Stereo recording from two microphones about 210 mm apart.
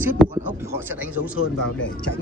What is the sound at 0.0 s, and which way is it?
Speech, 10° right (ahead or behind).